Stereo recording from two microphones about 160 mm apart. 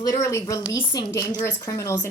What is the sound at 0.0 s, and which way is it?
A woman's voice, 20° left (ahead or behind).